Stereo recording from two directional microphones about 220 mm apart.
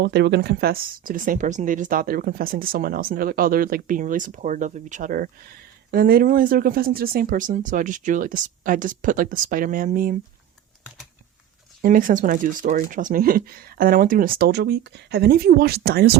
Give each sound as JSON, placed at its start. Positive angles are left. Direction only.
{"t": 0.0, "sound": "speech", "side_deg": -50}
{"t": 11.8, "sound": "speech", "side_deg": -40}